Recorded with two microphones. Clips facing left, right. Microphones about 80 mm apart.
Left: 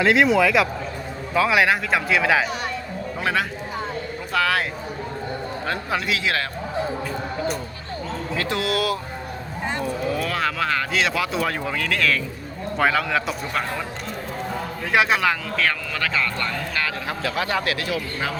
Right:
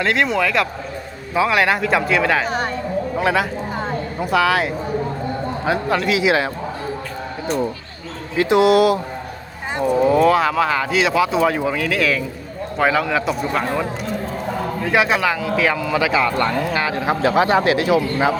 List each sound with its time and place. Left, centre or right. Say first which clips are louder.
0.0 s speech: left 1 dB; centre
5.9 s speech: right 4 dB; centre
6.1 s a man's voice: right 7 dB; centre
8.4 s speech: right 11 dB; centre
10.2 s speech: right 9 dB; centre
14.8 s a man's voice: right 2 dB; centre
16.7 s speech: right 7 dB; right